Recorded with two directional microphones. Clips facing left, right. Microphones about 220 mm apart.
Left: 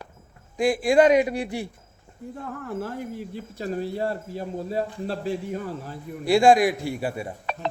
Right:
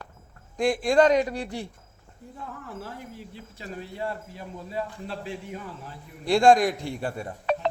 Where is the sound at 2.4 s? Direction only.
50° left (ahead or behind).